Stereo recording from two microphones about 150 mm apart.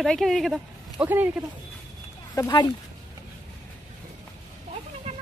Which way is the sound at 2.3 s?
25° left (ahead or behind).